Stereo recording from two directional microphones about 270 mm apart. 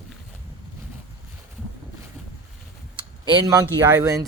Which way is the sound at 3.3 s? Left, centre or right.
Centre.